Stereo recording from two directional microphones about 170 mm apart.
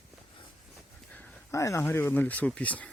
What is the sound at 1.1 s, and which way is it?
Speech, 10° left (ahead or behind).